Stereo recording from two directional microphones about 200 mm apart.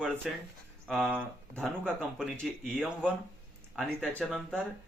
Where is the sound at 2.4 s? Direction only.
5° left (ahead or behind).